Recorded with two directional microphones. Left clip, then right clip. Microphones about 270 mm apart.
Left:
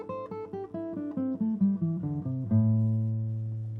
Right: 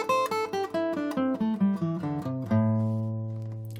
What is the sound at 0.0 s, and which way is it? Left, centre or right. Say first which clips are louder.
Music: right 11 dB; centre.